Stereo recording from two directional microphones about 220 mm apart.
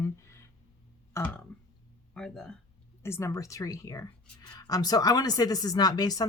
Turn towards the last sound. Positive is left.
turn(degrees=15)  # may be behind; listen again after turning